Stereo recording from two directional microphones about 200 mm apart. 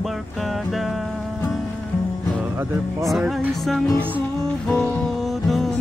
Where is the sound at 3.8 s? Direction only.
15° left (ahead or behind).